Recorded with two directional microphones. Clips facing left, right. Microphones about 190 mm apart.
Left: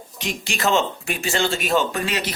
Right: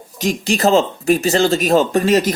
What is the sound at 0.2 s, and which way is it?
Speech, 40° right (ahead or behind).